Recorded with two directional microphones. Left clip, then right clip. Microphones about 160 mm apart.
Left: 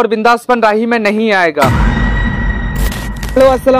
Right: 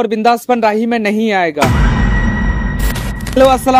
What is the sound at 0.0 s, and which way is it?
A man's voice, 40° right (ahead or behind).